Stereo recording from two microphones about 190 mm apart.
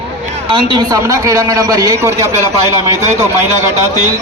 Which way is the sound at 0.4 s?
25° right (ahead or behind).